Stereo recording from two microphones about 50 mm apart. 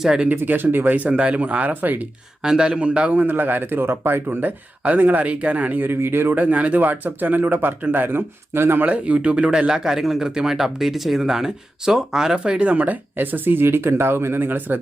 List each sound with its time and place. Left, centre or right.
0.0 s speech: centre
0.3 s speech: right
0.9 s speech: right
2.4 s speech: centre
3.3 s speech: right
5.9 s speech: right
6.3 s speech: right
8.8 s speech: right